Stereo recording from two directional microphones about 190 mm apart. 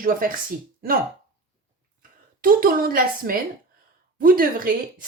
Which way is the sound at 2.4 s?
50° right (ahead or behind).